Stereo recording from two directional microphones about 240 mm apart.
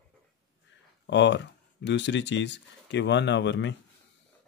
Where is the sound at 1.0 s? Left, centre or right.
Left.